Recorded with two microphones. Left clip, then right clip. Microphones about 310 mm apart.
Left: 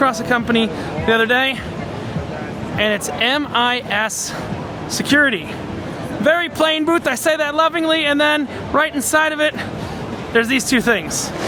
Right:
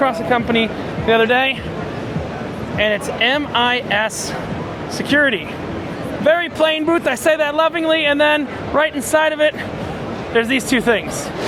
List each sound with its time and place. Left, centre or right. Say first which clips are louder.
0.0 s speech: even; left
2.7 s speech: right 1 dB; left